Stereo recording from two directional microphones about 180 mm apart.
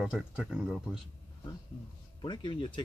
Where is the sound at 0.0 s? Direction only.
Centre (ahead or behind).